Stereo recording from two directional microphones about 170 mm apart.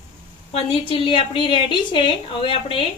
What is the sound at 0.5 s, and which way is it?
A woman's voice, 35° left (ahead or behind).